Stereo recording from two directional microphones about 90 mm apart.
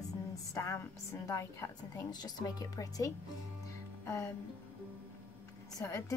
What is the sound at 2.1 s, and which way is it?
A woman's voice, 50° left (ahead or behind).